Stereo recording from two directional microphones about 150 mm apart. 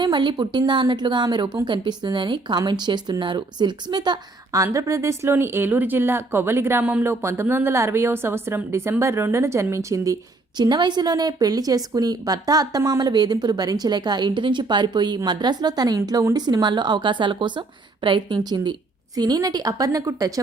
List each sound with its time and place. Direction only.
0.0 s a woman's voice: 30° right (ahead or behind)